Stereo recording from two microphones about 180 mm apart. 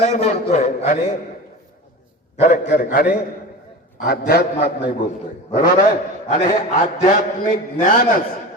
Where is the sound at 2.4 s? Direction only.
50° left (ahead or behind).